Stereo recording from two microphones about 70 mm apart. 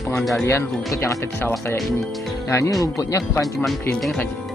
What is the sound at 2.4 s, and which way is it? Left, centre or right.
Speech, left.